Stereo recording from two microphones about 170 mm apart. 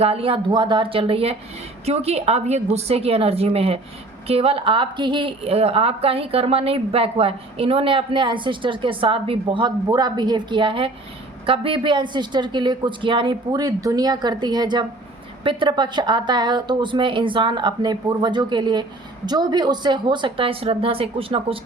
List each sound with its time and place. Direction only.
0.0 s a woman's voice: 35° right (ahead or behind)